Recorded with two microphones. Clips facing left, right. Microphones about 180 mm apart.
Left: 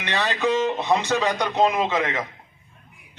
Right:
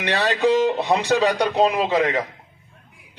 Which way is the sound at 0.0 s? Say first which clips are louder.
Right 4 dB; 35° right (ahead or behind).